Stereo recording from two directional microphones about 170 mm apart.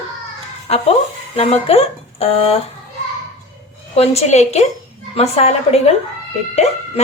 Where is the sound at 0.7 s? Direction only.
35° left (ahead or behind).